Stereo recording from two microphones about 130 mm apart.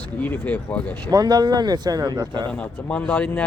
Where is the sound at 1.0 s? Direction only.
30° right (ahead or behind).